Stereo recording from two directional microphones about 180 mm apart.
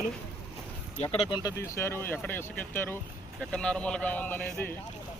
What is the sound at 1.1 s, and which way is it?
Speech, 30° left (ahead or behind).